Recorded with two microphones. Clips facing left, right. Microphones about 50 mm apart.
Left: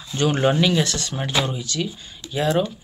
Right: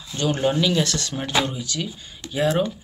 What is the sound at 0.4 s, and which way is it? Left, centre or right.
Speech, left.